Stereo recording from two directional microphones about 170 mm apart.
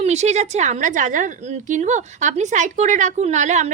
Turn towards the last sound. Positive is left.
turn(degrees=-45)  # may be behind; listen again after turning